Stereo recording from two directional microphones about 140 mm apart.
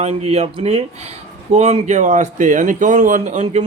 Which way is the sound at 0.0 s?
50° right (ahead or behind).